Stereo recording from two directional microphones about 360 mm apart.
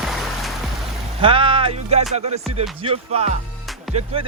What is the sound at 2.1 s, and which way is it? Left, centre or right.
Music, centre.